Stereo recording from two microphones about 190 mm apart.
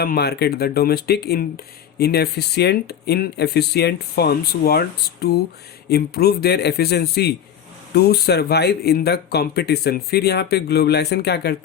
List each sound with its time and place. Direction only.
0.0 s speech: 55° left (ahead or behind)